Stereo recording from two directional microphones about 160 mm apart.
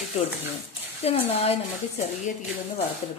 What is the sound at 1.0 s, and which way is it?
Speech, 40° left (ahead or behind).